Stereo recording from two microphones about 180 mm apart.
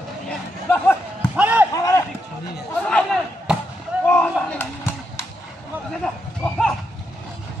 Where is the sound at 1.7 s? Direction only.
20° left (ahead or behind).